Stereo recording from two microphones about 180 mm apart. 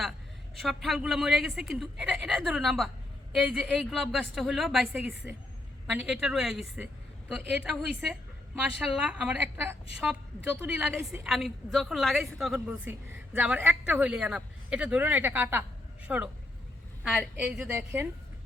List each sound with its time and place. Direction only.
0.6 s a woman's voice: centre (ahead or behind)